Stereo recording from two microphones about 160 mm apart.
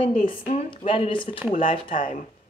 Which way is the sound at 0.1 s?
55° left (ahead or behind).